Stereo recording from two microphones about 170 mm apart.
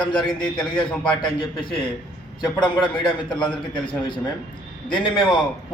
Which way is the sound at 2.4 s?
25° left (ahead or behind).